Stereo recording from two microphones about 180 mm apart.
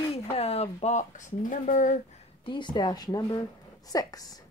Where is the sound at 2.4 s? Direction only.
25° left (ahead or behind).